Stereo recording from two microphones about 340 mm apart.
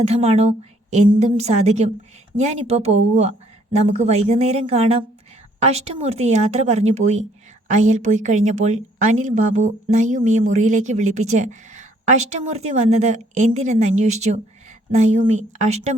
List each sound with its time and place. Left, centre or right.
0.0 s a woman's voice: centre